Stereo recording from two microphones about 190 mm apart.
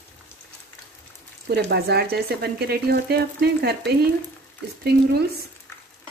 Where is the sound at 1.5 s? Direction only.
60° right (ahead or behind).